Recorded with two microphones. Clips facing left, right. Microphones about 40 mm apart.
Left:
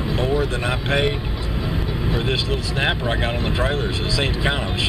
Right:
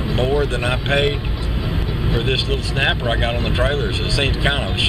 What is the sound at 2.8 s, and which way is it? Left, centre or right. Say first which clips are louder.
Speech: right 3 dB; right.